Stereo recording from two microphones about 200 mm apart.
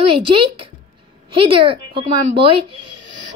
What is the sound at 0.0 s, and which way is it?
A woman's voice, 25° right (ahead or behind).